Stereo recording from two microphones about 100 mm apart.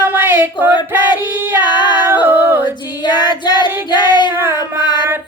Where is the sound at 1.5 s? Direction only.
50° left (ahead or behind).